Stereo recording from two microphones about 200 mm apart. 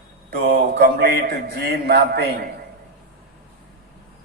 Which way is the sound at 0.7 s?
50° right (ahead or behind).